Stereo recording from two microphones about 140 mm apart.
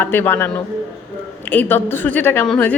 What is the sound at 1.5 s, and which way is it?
A woman's voice, 15° left (ahead or behind).